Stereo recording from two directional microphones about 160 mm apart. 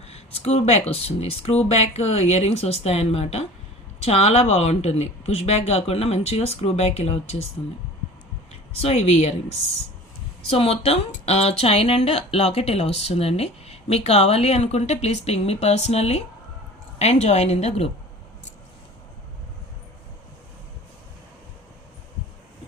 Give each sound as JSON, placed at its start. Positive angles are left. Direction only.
{"t": 0.0, "sound": "speech", "side_deg": 40}
{"t": 8.7, "sound": "a woman's voice", "side_deg": 40}